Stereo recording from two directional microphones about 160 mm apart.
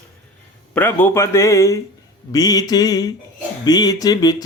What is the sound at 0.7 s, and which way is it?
Speech, 10° left (ahead or behind).